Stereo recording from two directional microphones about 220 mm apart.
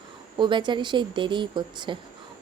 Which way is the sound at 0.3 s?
20° right (ahead or behind).